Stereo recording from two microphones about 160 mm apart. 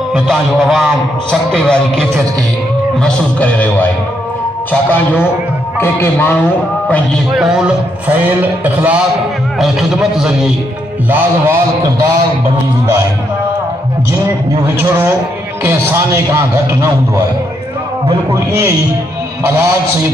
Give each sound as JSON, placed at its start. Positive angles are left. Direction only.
{"t": 0.1, "sound": "speech", "side_deg": 0}
{"t": 4.9, "sound": "speech", "side_deg": 15}
{"t": 7.3, "sound": "a man's voice", "side_deg": -5}
{"t": 15.6, "sound": "a man's voice", "side_deg": -15}